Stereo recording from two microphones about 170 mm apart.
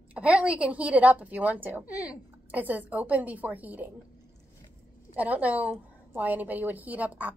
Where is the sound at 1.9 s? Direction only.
20° left (ahead or behind).